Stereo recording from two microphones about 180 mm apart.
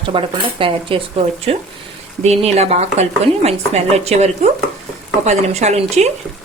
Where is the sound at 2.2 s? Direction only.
35° right (ahead or behind).